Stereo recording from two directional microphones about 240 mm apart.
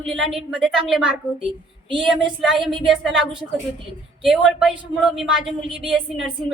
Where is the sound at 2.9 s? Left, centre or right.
Centre.